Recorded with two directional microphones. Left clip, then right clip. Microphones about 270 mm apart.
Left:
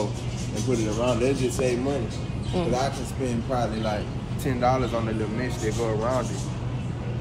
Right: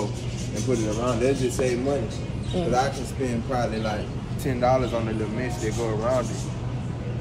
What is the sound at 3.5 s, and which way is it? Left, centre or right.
A man's voice, centre.